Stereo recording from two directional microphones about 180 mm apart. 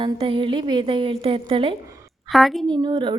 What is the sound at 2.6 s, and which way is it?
Speech, 25° right (ahead or behind).